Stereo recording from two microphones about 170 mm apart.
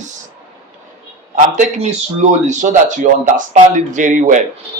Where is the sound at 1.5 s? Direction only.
45° right (ahead or behind).